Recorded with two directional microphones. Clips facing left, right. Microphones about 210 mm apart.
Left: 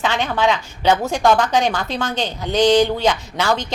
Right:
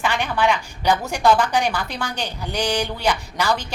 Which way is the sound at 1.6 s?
10° right (ahead or behind).